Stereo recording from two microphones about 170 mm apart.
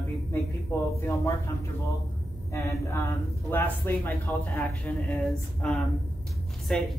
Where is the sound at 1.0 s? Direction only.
15° left (ahead or behind).